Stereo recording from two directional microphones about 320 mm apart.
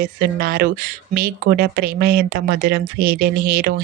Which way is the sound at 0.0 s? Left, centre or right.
Right.